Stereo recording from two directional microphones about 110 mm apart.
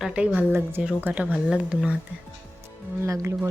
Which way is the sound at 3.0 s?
25° right (ahead or behind).